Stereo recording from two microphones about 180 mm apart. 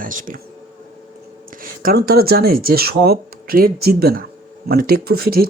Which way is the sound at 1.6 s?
55° right (ahead or behind).